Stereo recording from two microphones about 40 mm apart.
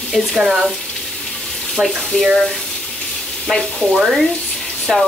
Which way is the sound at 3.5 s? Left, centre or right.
Centre.